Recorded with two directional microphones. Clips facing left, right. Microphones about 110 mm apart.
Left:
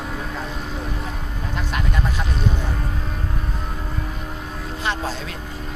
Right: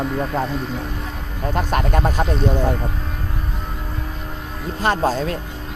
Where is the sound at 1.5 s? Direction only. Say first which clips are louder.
Right 7 dB; 45° right (ahead or behind).